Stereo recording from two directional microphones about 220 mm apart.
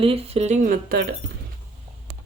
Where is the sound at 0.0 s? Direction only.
25° right (ahead or behind).